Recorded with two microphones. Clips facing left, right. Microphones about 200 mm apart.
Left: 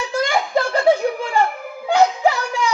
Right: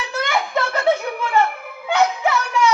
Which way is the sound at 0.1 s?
30° left (ahead or behind).